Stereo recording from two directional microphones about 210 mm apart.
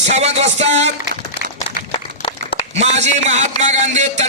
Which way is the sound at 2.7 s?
30° right (ahead or behind).